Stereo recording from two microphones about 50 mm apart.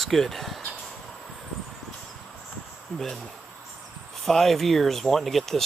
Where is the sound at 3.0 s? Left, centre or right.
Centre.